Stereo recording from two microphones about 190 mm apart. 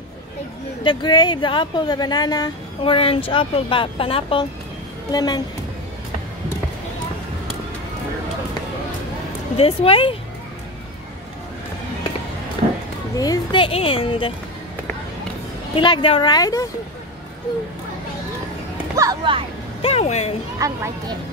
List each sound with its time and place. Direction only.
0.8 s speech: 25° left (ahead or behind)
9.6 s speech: 30° left (ahead or behind)
13.2 s speech: 20° left (ahead or behind)
15.7 s speech: 25° left (ahead or behind)
18.9 s a child's voice: 20° right (ahead or behind)
19.8 s speech: 35° left (ahead or behind)
20.5 s speech: 15° right (ahead or behind)